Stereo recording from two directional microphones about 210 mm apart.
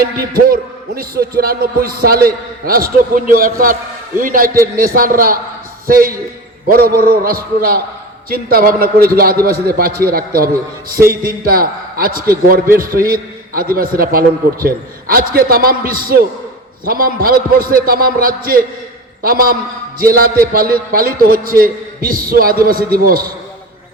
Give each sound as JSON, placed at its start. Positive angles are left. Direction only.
{"t": 0.0, "sound": "music", "side_deg": -45}
{"t": 4.2, "sound": "a man's voice", "side_deg": -40}
{"t": 4.6, "sound": "music", "side_deg": -45}